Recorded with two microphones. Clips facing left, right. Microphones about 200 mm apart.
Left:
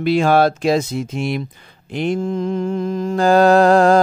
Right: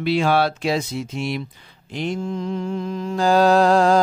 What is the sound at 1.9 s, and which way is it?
Mantra, 55° left (ahead or behind).